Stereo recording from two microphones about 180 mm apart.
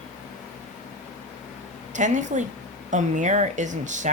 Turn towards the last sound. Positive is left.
turn(degrees=-45)  # may be behind; listen again after turning